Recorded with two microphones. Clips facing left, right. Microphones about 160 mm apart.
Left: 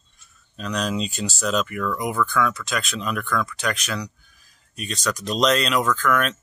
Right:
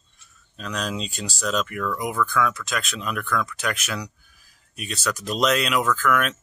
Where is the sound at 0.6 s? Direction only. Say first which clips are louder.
Left 4 dB; centre (ahead or behind).